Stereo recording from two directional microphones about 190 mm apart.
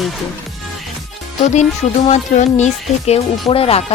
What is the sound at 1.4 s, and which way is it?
Speech, 35° left (ahead or behind).